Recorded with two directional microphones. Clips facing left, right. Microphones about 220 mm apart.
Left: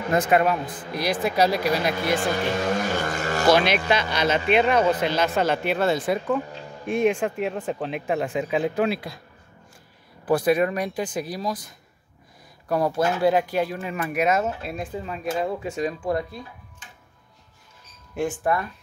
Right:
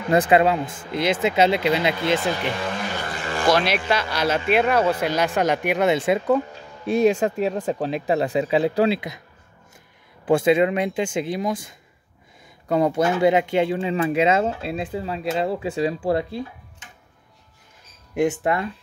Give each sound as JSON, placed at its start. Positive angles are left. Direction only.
{"t": 0.1, "sound": "speech", "side_deg": -30}
{"t": 2.1, "sound": "vehicle", "side_deg": 45}
{"t": 3.4, "sound": "speech", "side_deg": 0}
{"t": 6.9, "sound": "speech", "side_deg": -35}
{"t": 10.3, "sound": "speech", "side_deg": -25}
{"t": 12.6, "sound": "speech", "side_deg": -20}
{"t": 18.5, "sound": "speech", "side_deg": -25}